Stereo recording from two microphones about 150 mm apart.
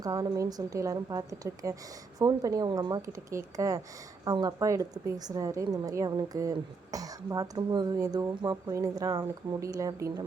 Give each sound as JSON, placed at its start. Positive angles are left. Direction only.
{"t": 0.0, "sound": "a woman's voice", "side_deg": -25}